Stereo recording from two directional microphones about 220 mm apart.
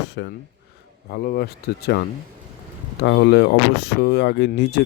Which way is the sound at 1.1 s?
45° left (ahead or behind).